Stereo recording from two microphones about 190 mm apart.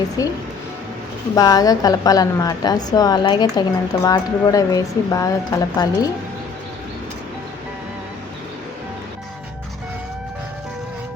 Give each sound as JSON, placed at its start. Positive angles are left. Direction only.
{"t": 1.4, "sound": "a woman's voice", "side_deg": 20}